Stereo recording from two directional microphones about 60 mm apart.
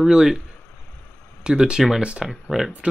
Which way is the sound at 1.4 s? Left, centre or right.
Centre.